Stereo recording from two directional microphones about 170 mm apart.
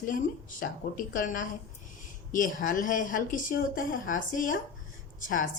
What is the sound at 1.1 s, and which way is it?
Speech, 55° left (ahead or behind).